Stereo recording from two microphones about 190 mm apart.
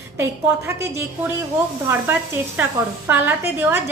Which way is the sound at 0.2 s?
15° right (ahead or behind).